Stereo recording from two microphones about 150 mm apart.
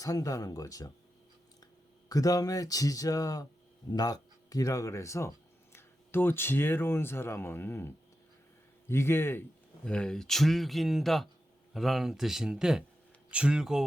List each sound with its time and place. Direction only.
0.0 s speech: 25° left (ahead or behind)
2.0 s speech: 25° left (ahead or behind); by 13.8 s 5° right (ahead or behind)